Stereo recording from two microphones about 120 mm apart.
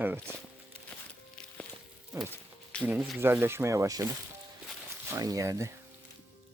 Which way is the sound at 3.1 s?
20° right (ahead or behind).